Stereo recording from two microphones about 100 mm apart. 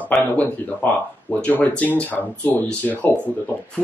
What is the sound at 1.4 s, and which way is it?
Speech, 15° left (ahead or behind).